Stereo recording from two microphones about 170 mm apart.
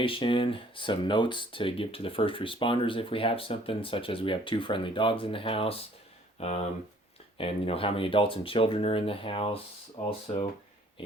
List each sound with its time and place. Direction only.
0.0 s speech: 30° left (ahead or behind)